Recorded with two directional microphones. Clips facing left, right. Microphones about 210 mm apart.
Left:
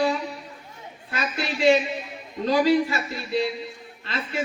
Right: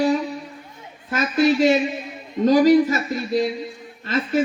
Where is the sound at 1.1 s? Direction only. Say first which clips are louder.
Right 11 dB; 45° right (ahead or behind).